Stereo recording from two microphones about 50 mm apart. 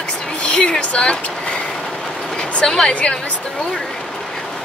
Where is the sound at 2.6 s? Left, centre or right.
Centre.